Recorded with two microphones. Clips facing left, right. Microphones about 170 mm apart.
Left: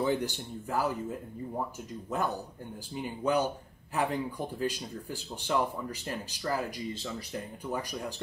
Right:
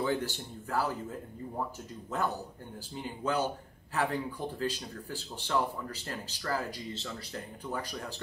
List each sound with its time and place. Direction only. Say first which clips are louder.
0.0 s speech: left 2 dB; 15° left (ahead or behind)
2.9 s speech: left 4 dB; 15° left (ahead or behind)